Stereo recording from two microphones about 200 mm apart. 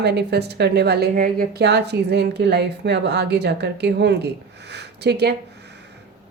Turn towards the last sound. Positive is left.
turn(degrees=-55)  # may be behind; listen again after turning